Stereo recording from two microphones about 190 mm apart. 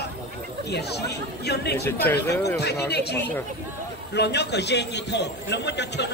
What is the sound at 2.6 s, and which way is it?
Speech, 60° left (ahead or behind).